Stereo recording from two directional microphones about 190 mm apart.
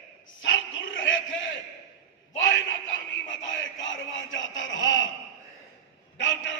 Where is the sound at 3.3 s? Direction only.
85° left.